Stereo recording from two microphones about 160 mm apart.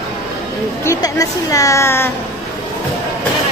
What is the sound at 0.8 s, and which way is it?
A woman's voice, 20° left (ahead or behind).